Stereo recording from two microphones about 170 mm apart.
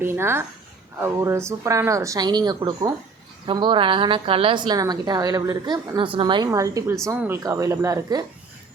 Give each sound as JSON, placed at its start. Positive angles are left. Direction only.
{"t": 0.0, "sound": "a woman's voice", "side_deg": -15}